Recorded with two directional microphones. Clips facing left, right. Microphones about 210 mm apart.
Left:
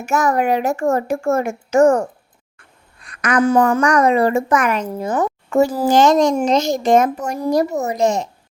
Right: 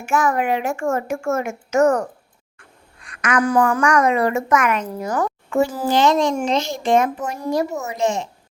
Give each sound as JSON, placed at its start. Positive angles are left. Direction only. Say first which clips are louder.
{"t": 0.0, "sound": "speech", "louder": "left 2 dB", "side_deg": 40}
{"t": 5.5, "sound": "a child's voice", "louder": "left 5 dB", "side_deg": 40}